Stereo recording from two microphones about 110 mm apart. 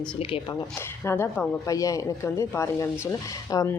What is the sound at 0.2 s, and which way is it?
Speech, 60° left (ahead or behind).